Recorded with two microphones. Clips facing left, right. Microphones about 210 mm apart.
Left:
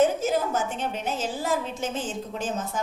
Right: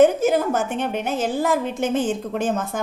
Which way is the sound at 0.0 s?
60° right (ahead or behind).